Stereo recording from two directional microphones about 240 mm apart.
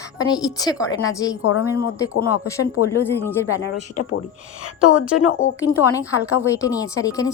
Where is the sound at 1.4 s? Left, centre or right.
Left.